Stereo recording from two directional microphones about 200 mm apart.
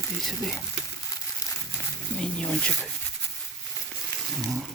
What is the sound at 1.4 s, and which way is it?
Crumpling, 15° left (ahead or behind).